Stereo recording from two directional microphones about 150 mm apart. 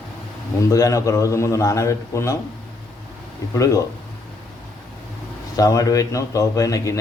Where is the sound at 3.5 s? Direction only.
20° left (ahead or behind).